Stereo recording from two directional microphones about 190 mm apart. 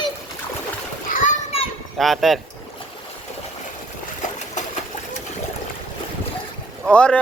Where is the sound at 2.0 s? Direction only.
Centre (ahead or behind).